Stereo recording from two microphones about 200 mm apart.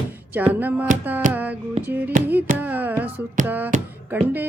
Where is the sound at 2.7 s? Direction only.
10° right (ahead or behind).